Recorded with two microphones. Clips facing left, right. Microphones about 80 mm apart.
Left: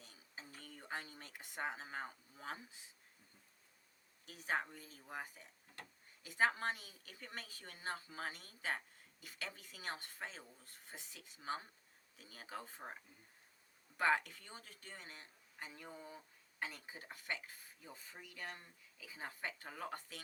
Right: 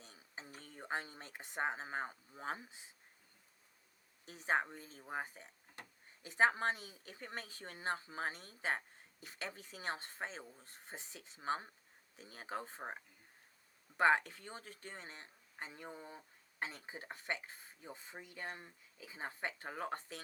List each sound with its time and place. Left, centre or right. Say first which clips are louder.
0.0 s speech: right 3 dB; right
4.3 s speech: right 4 dB; right
5.8 s tick-tock: right 1 dB; centre
6.2 s speech: right 4 dB; right